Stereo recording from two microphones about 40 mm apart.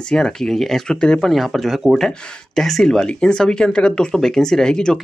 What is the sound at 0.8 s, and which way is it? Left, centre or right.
Speech, left.